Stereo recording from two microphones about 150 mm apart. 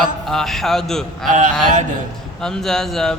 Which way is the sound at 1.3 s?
55° right (ahead or behind).